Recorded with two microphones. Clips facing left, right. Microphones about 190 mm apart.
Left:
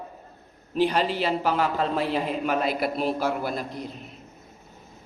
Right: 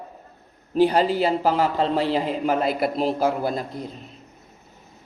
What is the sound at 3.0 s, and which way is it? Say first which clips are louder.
Speech: right 4 dB; 30° right (ahead or behind).